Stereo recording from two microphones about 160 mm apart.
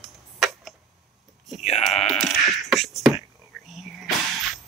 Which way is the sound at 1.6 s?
45° left (ahead or behind).